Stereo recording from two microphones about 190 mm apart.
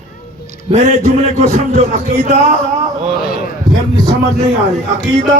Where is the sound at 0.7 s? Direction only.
35° right (ahead or behind).